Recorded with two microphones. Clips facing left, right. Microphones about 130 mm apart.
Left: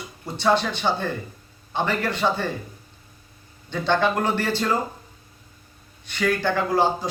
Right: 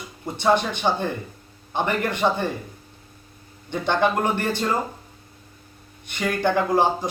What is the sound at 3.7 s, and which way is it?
Speech, 15° right (ahead or behind).